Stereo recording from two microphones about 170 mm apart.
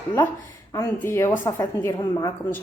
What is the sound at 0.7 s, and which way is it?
A woman's voice, 15° left (ahead or behind).